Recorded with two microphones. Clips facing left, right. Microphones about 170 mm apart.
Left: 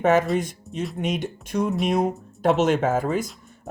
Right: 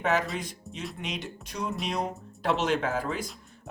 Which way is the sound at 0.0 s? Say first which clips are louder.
Left 8 dB; 50° left (ahead or behind).